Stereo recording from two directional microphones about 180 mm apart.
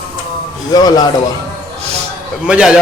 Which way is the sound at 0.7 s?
20° left (ahead or behind).